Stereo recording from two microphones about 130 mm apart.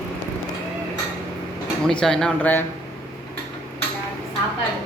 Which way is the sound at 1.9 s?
5° left (ahead or behind).